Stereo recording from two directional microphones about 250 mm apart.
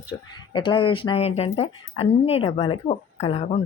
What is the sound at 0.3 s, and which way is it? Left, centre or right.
A woman's voice, centre.